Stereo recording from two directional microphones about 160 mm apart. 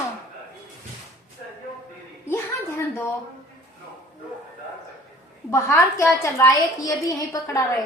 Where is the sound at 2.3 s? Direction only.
15° left (ahead or behind).